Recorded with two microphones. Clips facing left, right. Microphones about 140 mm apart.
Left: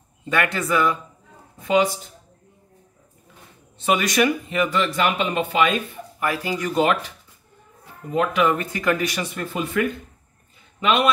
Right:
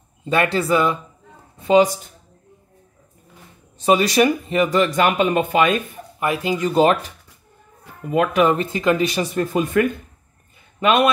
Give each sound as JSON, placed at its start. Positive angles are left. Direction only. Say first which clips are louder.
{"t": 0.2, "sound": "speech", "louder": "right 4 dB", "side_deg": -30}
{"t": 3.8, "sound": "speech", "louder": "right 4 dB", "side_deg": -30}
{"t": 6.1, "sound": "speech", "louder": "right 3 dB", "side_deg": -20}
{"t": 8.3, "sound": "speech", "louder": "right 3 dB", "side_deg": -40}
{"t": 8.5, "sound": "speech", "louder": "right 4 dB", "side_deg": -25}
{"t": 9.3, "sound": "a man's voice", "louder": "right 6 dB", "side_deg": -40}